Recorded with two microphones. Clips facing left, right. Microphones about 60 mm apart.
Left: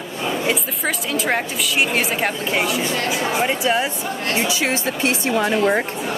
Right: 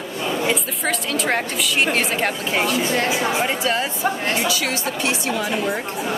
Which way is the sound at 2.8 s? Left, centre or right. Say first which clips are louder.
Right 2 dB; right.